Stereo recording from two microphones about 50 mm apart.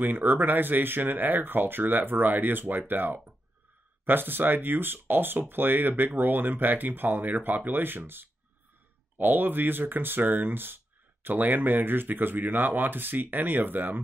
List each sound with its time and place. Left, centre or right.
0.0 s speech: right